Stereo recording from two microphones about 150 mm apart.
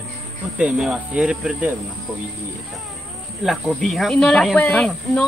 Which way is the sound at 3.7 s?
Centre (ahead or behind).